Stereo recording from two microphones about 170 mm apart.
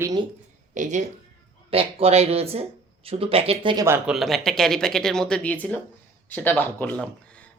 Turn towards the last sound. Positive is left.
turn(degrees=5)  # may be behind; listen again after turning